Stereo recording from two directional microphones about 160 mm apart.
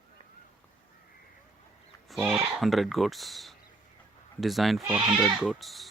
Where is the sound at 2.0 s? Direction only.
Centre (ahead or behind).